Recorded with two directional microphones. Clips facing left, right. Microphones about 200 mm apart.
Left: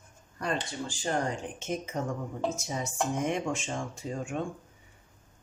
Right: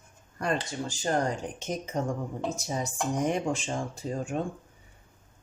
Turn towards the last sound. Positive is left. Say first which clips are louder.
# right 3 dB
turn(degrees=-35)  # may be behind; listen again after turning